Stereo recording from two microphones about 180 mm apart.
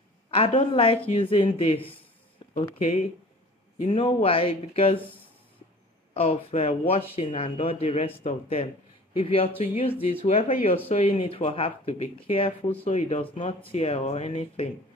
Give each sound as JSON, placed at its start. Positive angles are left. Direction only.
{"t": 0.3, "sound": "speech", "side_deg": 35}
{"t": 3.8, "sound": "speech", "side_deg": 35}
{"t": 6.1, "sound": "speech", "side_deg": 35}